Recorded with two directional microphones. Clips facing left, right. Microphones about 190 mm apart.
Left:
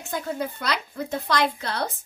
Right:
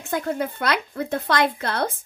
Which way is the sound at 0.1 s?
55° right (ahead or behind).